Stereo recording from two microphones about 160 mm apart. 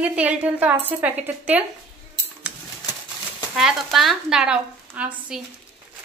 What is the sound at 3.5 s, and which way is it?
A woman's voice, centre (ahead or behind).